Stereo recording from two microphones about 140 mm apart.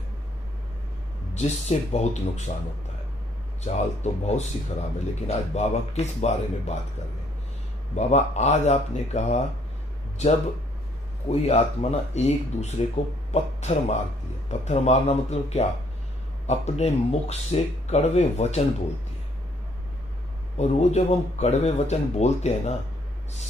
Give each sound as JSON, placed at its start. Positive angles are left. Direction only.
{"t": 1.3, "sound": "speech", "side_deg": 55}
{"t": 3.6, "sound": "speech", "side_deg": 55}
{"t": 7.9, "sound": "speech", "side_deg": 50}
{"t": 20.5, "sound": "speech", "side_deg": 50}